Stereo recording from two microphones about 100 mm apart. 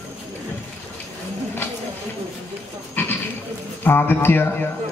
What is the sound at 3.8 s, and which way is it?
Speech, 20° left (ahead or behind).